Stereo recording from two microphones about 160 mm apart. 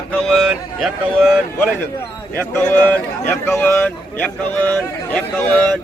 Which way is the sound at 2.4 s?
10° left (ahead or behind).